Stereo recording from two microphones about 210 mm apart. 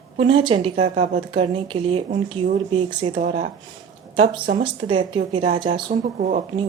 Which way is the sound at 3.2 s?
35° right (ahead or behind).